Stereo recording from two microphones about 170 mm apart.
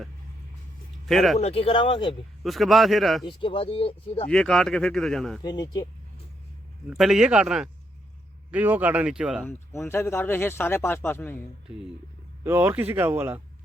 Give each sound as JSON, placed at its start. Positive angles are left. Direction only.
{"t": 1.0, "sound": "speech", "side_deg": 0}
{"t": 1.4, "sound": "speech", "side_deg": 35}
{"t": 2.4, "sound": "speech", "side_deg": 0}
{"t": 3.2, "sound": "speech", "side_deg": 30}
{"t": 4.3, "sound": "speech", "side_deg": 5}
{"t": 5.4, "sound": "speech", "side_deg": 25}
{"t": 6.8, "sound": "a man's voice", "side_deg": 0}
{"t": 9.5, "sound": "speech", "side_deg": 15}
{"t": 12.5, "sound": "a man's voice", "side_deg": -10}